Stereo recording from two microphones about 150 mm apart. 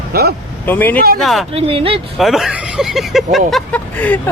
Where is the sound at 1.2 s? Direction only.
Centre (ahead or behind).